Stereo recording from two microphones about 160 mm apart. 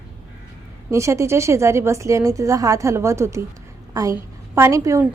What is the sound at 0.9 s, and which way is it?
A woman's voice, 20° right (ahead or behind).